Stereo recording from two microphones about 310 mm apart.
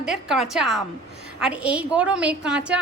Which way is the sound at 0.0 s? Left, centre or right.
Centre.